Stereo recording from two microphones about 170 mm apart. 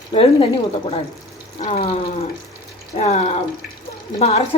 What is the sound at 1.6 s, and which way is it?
A woman's voice, 40° left (ahead or behind).